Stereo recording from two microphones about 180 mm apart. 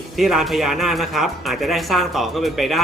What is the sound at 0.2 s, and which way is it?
Speech, centre (ahead or behind).